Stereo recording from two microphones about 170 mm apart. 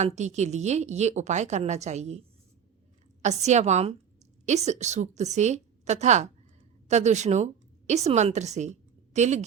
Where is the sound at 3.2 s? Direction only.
40° right (ahead or behind).